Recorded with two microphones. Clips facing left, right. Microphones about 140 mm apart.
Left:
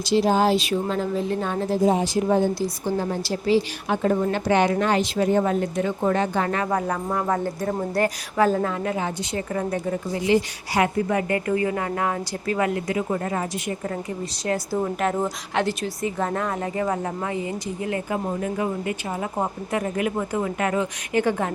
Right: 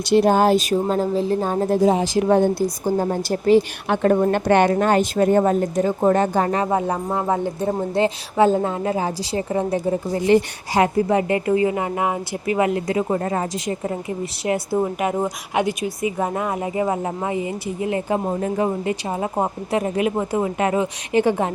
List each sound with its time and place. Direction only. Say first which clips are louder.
0.1 s speech: right 4 dB; 55° right (ahead or behind)
1.9 s speech: right 3 dB; 90° right; by 3.6 s 50° right (ahead or behind)
3.8 s a woman's voice: right 4 dB; 65° right (ahead or behind); by 13.7 s 35° right (ahead or behind)
14.4 s speech: right 4 dB; 25° right (ahead or behind)
15.0 s a woman's voice: right 2 dB; 10° right (ahead or behind)
16.1 s speech: right 2 dB; 15° right (ahead or behind)
18.3 s speech: right 4 dB; 35° right (ahead or behind)